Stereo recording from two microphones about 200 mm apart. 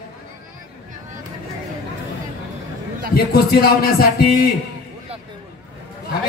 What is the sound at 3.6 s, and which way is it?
Speech, 50° left (ahead or behind).